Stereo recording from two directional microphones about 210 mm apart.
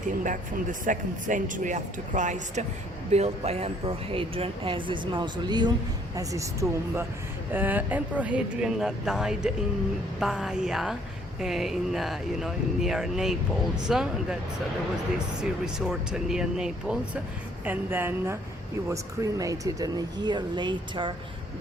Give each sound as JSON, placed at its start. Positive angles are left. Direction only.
{"t": 0.2, "sound": "speech", "side_deg": -40}
{"t": 15.4, "sound": "speech", "side_deg": -5}